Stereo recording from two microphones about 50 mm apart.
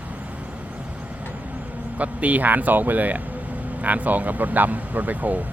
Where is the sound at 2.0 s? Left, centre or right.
Right.